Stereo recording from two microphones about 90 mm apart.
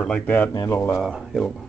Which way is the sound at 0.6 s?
30° left (ahead or behind).